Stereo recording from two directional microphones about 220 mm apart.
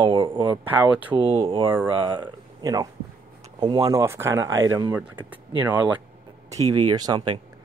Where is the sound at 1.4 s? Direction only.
25° right (ahead or behind).